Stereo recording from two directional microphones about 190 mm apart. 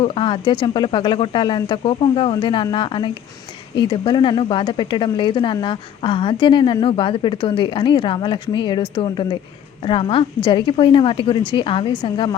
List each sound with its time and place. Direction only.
0.0 s speech: 25° left (ahead or behind)